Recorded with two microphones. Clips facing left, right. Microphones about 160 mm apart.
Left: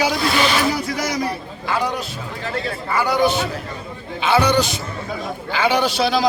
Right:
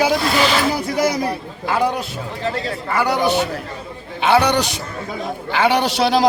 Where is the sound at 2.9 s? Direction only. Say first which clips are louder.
Even; 65° right (ahead or behind).